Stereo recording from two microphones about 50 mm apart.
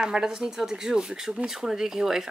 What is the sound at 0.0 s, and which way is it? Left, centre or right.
Speech, centre.